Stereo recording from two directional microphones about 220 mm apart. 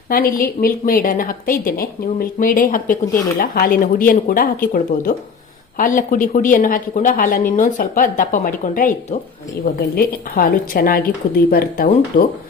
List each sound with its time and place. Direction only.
0.1 s a woman's voice: 40° left (ahead or behind)